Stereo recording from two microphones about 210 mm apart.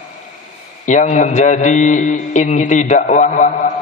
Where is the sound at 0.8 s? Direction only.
35° left (ahead or behind).